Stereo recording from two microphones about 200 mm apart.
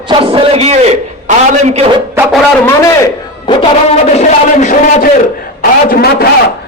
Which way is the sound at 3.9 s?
35° left (ahead or behind).